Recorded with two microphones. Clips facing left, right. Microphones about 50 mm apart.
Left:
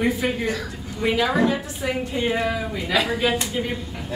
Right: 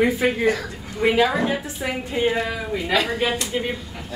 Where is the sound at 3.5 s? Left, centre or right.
Right.